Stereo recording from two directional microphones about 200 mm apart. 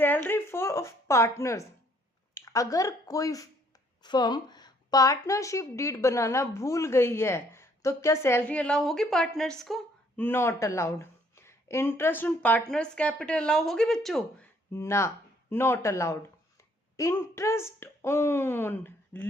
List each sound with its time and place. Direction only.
0.0 s a woman's voice: 10° left (ahead or behind)